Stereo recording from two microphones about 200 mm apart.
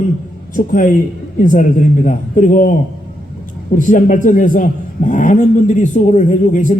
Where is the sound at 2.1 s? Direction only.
40° left (ahead or behind).